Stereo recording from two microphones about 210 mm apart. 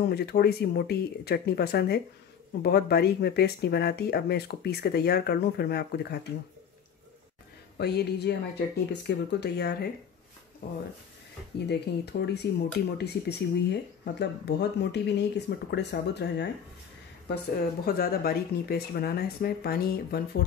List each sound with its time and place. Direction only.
0.1 s speech: 50° left (ahead or behind)
7.7 s speech: 50° left (ahead or behind)
17.8 s speech: 45° left (ahead or behind)